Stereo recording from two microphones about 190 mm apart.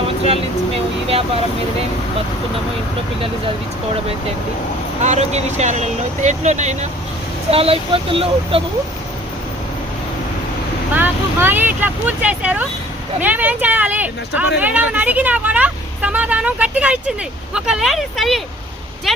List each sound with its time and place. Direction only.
5.0 s speech: 35° right (ahead or behind)
10.9 s speech: 10° right (ahead or behind)